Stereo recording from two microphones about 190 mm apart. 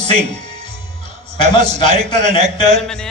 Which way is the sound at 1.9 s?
35° right (ahead or behind).